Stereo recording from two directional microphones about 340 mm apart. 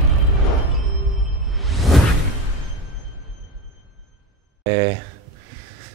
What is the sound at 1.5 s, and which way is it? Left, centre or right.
Whoosh, centre.